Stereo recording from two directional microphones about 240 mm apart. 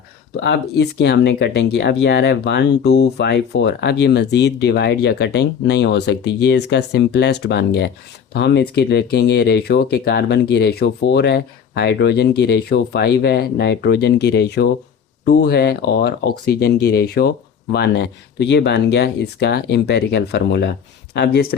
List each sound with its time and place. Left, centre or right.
0.4 s speech: left